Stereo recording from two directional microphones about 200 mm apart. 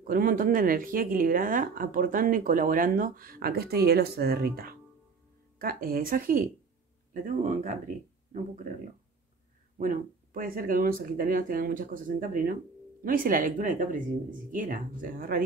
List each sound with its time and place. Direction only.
0.0 s speech: 45° right (ahead or behind)
9.8 s speech: 45° right (ahead or behind)